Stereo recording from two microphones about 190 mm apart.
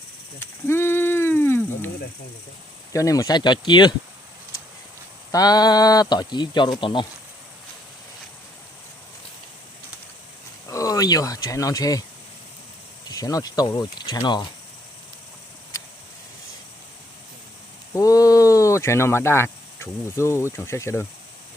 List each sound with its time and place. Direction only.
0.3 s a sound: 10° left (ahead or behind)
2.9 s speech: 15° left (ahead or behind)
5.3 s speech: 20° left (ahead or behind)
10.7 s speech: 20° left (ahead or behind)
13.1 s speech: 20° left (ahead or behind)
17.9 s speech: 20° left (ahead or behind)